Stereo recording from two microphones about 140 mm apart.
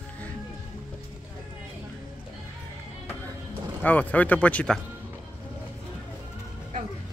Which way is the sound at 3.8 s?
10° left (ahead or behind).